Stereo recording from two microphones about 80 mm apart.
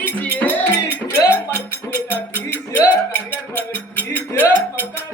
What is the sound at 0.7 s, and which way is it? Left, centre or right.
Music, left.